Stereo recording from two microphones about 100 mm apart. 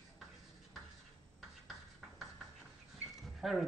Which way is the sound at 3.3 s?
Centre (ahead or behind).